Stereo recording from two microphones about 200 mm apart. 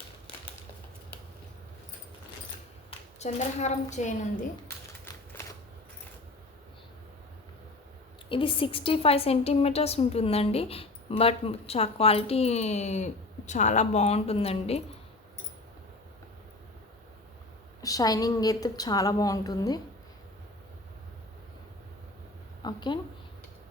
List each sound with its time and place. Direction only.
3.2 s a woman's voice: 35° left (ahead or behind)
8.3 s a woman's voice: 25° left (ahead or behind)
17.8 s a woman's voice: 20° left (ahead or behind)
22.6 s a sound: 20° left (ahead or behind)